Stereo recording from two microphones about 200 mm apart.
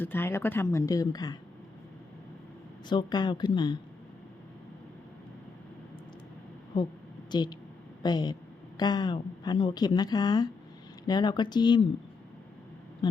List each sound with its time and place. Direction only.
0.0 s speech: 10° left (ahead or behind)
2.9 s a woman's voice: 20° left (ahead or behind)
7.3 s a woman's voice: 20° left (ahead or behind)
13.0 s a sound: 20° left (ahead or behind)